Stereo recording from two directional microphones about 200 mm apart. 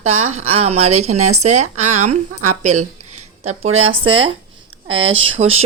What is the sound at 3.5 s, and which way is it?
A woman's voice, 30° right (ahead or behind).